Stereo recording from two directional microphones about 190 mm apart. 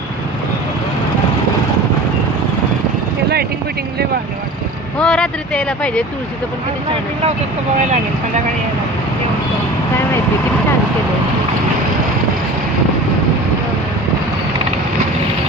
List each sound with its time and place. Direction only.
4.9 s speech: 5° left (ahead or behind)
7.8 s speech: 40° right (ahead or behind)